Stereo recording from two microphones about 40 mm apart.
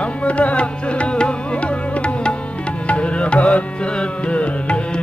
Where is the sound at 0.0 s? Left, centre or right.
Left.